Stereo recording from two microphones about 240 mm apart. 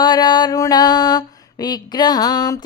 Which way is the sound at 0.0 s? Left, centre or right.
Centre.